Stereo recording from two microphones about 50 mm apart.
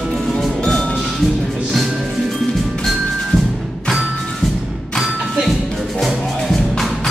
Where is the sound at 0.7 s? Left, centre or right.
Centre.